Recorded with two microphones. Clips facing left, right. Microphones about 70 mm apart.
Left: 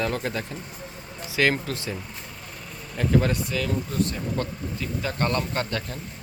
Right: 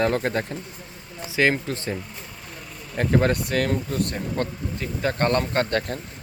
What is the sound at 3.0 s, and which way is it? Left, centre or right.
Speech, right.